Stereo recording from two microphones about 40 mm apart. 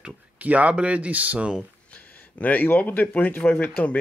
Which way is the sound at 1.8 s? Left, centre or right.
Left.